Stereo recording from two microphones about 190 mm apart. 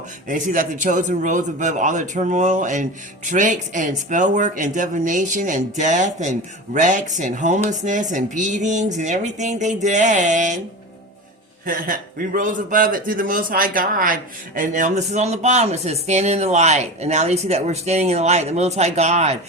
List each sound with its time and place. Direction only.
0.3 s a man's voice: 45° right (ahead or behind)
11.6 s a man's voice: 50° right (ahead or behind)